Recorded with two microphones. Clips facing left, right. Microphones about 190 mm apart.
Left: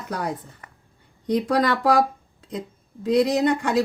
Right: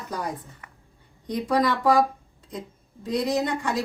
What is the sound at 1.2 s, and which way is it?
Speech, 75° left (ahead or behind).